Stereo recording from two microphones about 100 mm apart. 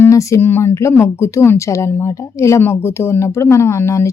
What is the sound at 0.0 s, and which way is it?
A woman's voice, 30° left (ahead or behind).